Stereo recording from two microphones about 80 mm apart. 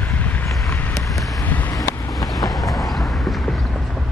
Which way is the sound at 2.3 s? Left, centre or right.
Centre.